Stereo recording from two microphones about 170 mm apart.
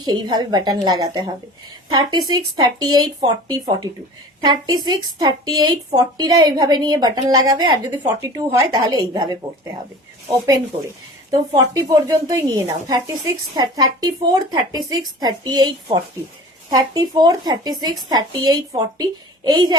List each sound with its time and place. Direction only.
0.0 s a woman's voice: 25° right (ahead or behind)
11.3 s speech: 20° right (ahead or behind)